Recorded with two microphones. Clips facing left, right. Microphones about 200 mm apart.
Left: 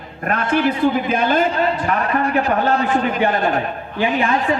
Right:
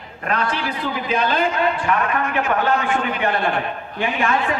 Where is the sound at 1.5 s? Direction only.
35° left (ahead or behind).